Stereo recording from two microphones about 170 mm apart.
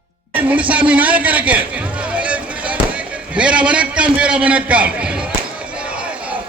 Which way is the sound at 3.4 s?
5° right (ahead or behind).